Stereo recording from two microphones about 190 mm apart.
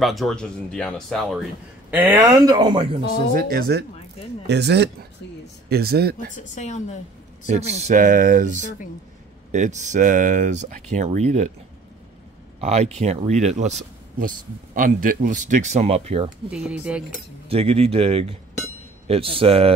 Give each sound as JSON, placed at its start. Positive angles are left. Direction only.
{"t": 0.0, "sound": "a man's voice", "side_deg": 0}
{"t": 3.3, "sound": "speech", "side_deg": -55}
{"t": 6.3, "sound": "a woman's voice", "side_deg": 40}
{"t": 7.4, "sound": "speech", "side_deg": -35}
{"t": 9.5, "sound": "speech", "side_deg": -40}
{"t": 12.5, "sound": "speech", "side_deg": -35}
{"t": 16.4, "sound": "a man's voice", "side_deg": -5}
{"t": 17.5, "sound": "speech", "side_deg": -30}